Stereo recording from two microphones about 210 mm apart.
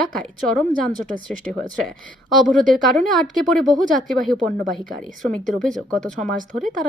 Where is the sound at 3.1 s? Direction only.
Centre (ahead or behind).